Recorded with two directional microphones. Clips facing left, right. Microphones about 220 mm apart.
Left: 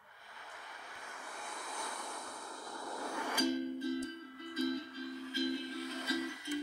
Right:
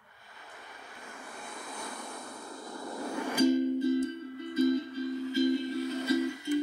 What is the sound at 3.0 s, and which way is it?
Music, 25° right (ahead or behind).